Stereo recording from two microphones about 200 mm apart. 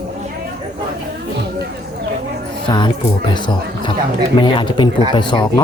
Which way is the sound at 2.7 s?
25° left (ahead or behind).